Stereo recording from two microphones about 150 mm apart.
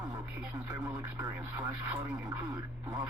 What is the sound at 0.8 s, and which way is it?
Speech, 20° right (ahead or behind).